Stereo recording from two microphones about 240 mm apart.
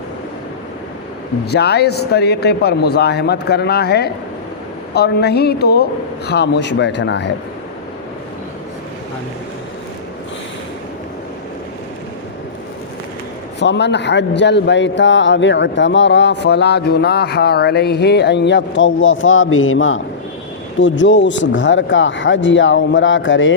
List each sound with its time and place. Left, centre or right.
1.5 s a man's voice: left
13.6 s a man's voice: left
21.0 s a man's voice: left